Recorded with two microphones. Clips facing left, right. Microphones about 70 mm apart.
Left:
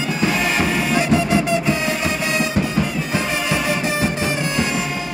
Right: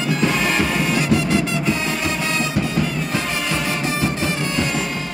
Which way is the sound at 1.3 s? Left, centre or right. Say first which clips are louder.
Left 2 dB; centre.